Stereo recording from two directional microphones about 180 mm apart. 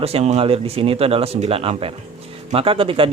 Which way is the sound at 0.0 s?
35° right (ahead or behind).